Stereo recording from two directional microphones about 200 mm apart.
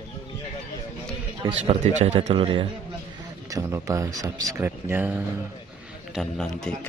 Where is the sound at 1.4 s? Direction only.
30° right (ahead or behind); by 5.2 s 10° right (ahead or behind).